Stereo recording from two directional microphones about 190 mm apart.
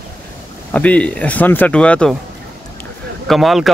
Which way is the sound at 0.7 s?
5° left (ahead or behind).